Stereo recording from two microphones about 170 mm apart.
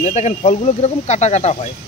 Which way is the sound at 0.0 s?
40° left (ahead or behind).